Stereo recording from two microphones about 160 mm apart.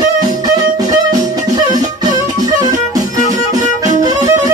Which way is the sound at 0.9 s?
25° right (ahead or behind).